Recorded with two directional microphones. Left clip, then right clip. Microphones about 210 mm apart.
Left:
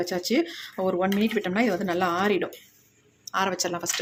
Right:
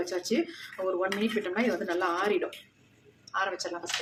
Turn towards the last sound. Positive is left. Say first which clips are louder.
# left 5 dB
turn(degrees=45)  # may be behind; listen again after turning